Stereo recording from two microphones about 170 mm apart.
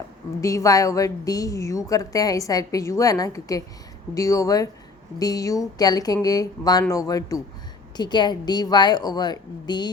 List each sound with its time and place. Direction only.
0.4 s a woman's voice: 20° left (ahead or behind)